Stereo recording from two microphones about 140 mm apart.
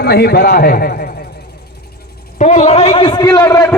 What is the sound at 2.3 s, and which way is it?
A man's voice, 55° left (ahead or behind).